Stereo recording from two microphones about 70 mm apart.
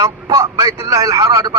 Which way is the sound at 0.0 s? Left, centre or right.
Right.